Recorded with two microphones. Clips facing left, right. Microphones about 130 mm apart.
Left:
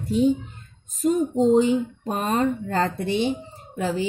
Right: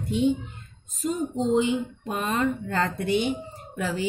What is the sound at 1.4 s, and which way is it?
Speech, 40° left (ahead or behind).